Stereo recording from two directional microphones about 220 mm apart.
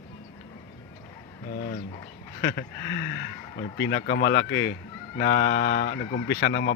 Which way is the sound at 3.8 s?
50° left (ahead or behind).